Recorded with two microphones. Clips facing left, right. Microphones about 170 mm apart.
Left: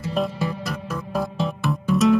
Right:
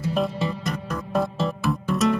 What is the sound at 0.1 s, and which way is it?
Music, centre (ahead or behind).